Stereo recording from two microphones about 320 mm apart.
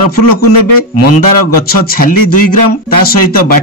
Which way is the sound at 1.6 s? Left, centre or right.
Left.